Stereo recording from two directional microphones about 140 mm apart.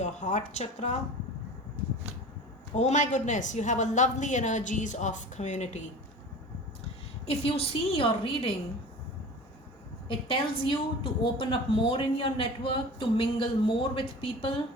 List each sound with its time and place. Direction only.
0.0 s a woman's voice: 60° left (ahead or behind)
2.7 s a woman's voice: 55° left (ahead or behind)
7.3 s a woman's voice: 45° left (ahead or behind)
10.1 s a woman's voice: 40° left (ahead or behind)